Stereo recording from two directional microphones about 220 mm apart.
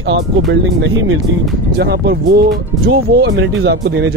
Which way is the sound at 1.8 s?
45° right (ahead or behind).